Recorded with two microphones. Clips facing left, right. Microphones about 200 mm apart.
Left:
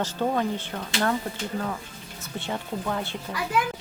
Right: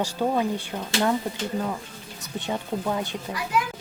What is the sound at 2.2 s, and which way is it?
Speech, 15° right (ahead or behind).